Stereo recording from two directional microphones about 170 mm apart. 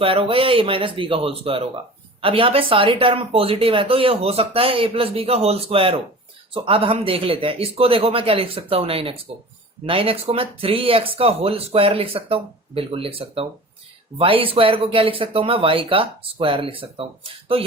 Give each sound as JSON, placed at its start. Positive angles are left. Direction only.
{"t": 0.0, "sound": "speech", "side_deg": -30}